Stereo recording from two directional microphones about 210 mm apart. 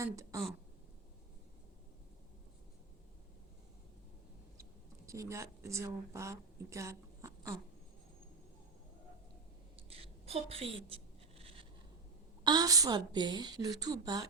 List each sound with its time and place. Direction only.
0.0 s speech: 15° right (ahead or behind)
5.0 s a woman's voice: 15° right (ahead or behind)
9.9 s writing: 25° right (ahead or behind)
12.5 s a woman's voice: 20° right (ahead or behind)